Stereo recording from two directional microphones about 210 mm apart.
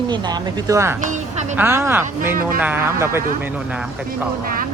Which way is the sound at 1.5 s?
10° right (ahead or behind).